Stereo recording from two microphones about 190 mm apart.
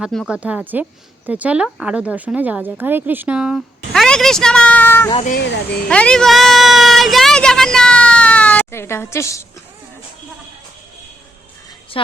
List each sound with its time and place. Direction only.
0.0 s speech: centre (ahead or behind); by 9.4 s 15° left (ahead or behind)
11.9 s a woman's voice: 30° left (ahead or behind)